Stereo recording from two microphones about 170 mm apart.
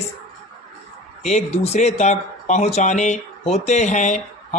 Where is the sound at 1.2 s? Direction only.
40° left (ahead or behind).